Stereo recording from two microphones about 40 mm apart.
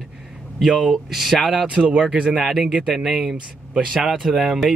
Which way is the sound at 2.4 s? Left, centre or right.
Centre.